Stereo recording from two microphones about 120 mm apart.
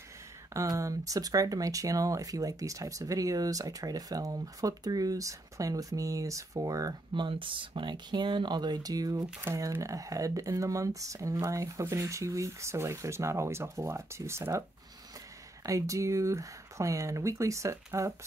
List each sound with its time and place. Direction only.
0.5 s speech: 25° right (ahead or behind)
15.6 s speech: 25° right (ahead or behind)